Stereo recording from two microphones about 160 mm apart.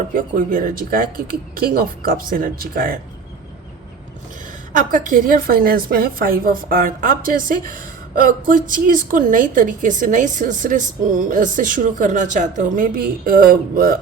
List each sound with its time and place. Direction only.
0.1 s a woman's voice: 60° right (ahead or behind)
4.9 s a woman's voice: 55° right (ahead or behind)